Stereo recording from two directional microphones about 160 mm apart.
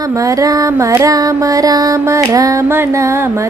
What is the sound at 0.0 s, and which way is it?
Music, 20° right (ahead or behind).